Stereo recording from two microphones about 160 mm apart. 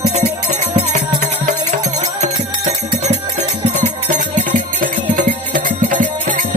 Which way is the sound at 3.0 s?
45° right (ahead or behind).